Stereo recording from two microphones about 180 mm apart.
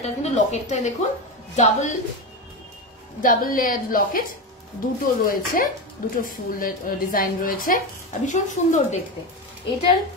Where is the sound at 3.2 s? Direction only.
50° left (ahead or behind).